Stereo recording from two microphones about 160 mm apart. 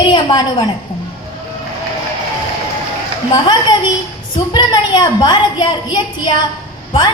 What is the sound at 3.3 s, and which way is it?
A woman's voice, 25° left (ahead or behind).